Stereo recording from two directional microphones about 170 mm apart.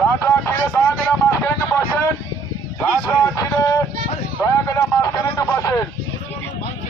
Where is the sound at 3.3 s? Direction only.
20° left (ahead or behind).